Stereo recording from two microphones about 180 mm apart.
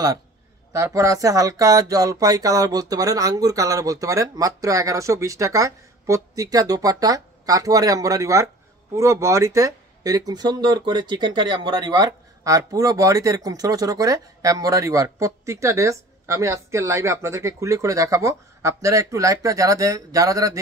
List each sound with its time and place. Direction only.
0.7 s speech: 15° right (ahead or behind)